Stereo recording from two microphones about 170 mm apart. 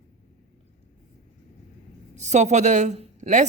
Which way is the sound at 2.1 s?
45° right (ahead or behind).